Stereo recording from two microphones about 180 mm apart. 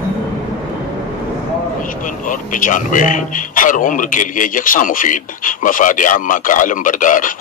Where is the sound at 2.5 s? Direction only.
45° left (ahead or behind).